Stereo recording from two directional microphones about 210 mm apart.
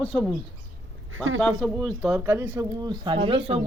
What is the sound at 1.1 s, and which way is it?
Speech, 65° right (ahead or behind).